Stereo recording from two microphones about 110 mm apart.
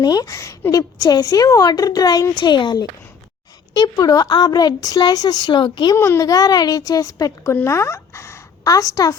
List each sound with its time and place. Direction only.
0.0 s a woman's voice: 35° left (ahead or behind)
2.3 s speech: 45° left (ahead or behind)
3.9 s a woman's voice: 35° left (ahead or behind)
6.0 s a woman's voice: 30° left (ahead or behind)